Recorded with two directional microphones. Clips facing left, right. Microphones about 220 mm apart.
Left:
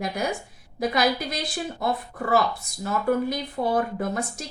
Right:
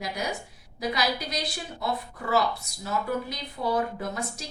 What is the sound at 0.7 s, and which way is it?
Speech, 50° left (ahead or behind).